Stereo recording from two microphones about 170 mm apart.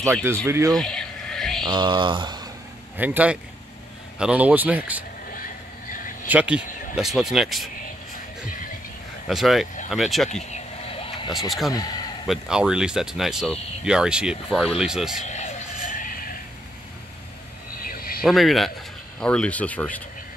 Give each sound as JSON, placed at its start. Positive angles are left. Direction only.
{"t": 0.0, "sound": "speech", "side_deg": -15}
{"t": 0.7, "sound": "a sound", "side_deg": 5}
{"t": 1.7, "sound": "speech", "side_deg": -25}
{"t": 3.0, "sound": "speech", "side_deg": -10}
{"t": 5.3, "sound": "vehicle", "side_deg": 55}
{"t": 6.2, "sound": "speech", "side_deg": -10}
{"t": 9.3, "sound": "speech", "side_deg": 0}
{"t": 10.3, "sound": "vehicle", "side_deg": 40}
{"t": 11.3, "sound": "speech", "side_deg": 0}
{"t": 11.7, "sound": "a man's voice", "side_deg": 25}
{"t": 12.3, "sound": "speech", "side_deg": -5}
{"t": 15.2, "sound": "vehicle", "side_deg": 45}
{"t": 17.8, "sound": "a sound", "side_deg": 60}
{"t": 18.2, "sound": "speech", "side_deg": 0}